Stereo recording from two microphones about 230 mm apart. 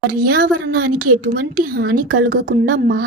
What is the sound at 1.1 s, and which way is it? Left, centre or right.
Speech, right.